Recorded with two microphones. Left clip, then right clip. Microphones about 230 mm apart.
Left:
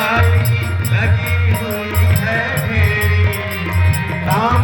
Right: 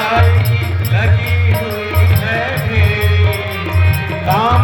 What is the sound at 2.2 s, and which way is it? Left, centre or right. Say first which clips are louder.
Music: left 1 dB; centre.